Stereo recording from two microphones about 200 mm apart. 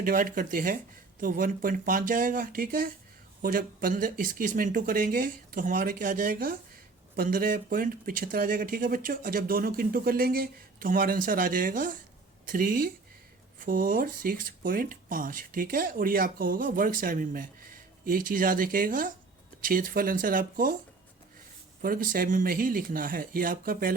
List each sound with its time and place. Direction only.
0.0 s speech: 45° right (ahead or behind)
21.8 s speech: 45° right (ahead or behind)